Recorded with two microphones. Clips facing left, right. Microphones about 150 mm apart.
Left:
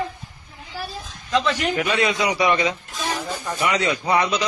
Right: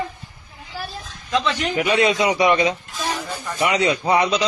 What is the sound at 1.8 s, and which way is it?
A man's voice, 20° right (ahead or behind).